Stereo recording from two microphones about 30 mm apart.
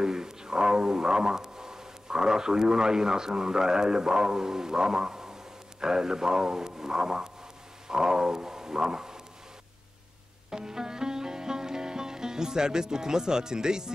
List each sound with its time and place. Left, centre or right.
0.0 s speech: right
7.9 s a sound: right
10.5 s music: right